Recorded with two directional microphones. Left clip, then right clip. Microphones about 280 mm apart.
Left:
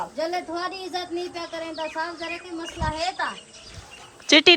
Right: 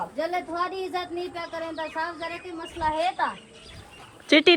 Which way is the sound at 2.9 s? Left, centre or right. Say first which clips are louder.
Right 2 dB; right.